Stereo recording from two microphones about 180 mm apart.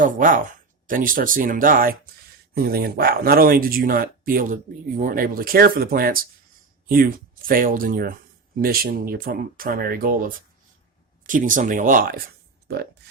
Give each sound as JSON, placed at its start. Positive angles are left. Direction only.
{"t": 0.0, "sound": "speech", "side_deg": -50}
{"t": 12.6, "sound": "speech", "side_deg": -65}